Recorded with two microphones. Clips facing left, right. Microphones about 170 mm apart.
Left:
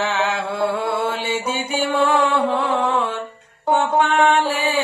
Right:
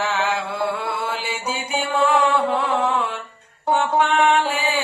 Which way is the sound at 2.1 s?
Centre (ahead or behind).